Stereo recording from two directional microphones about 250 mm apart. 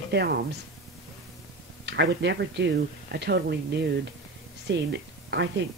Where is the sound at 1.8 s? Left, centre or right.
Right.